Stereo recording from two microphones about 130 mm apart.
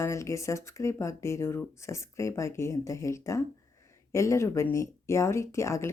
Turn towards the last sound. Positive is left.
turn(degrees=20)  # may be behind; listen again after turning